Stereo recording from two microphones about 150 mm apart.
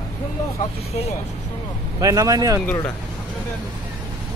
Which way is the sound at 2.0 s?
20° right (ahead or behind).